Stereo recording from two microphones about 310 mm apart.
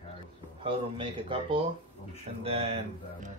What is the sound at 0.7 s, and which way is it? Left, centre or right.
Speech, centre.